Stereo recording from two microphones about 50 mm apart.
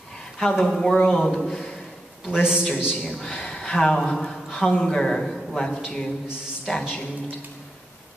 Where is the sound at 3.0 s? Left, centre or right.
Centre.